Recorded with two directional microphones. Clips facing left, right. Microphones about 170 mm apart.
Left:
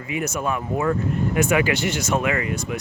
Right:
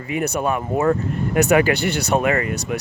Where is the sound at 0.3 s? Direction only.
55° right (ahead or behind).